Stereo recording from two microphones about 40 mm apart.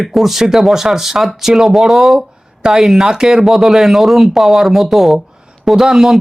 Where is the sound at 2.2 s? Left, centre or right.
Centre.